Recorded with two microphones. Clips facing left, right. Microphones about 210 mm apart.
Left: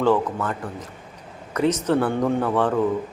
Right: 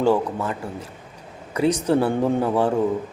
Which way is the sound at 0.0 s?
10° right (ahead or behind).